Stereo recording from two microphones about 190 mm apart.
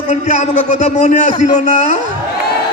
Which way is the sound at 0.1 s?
35° left (ahead or behind).